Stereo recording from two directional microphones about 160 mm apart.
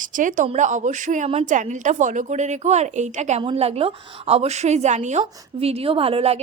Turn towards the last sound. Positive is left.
turn(degrees=-40)  # may be behind; listen again after turning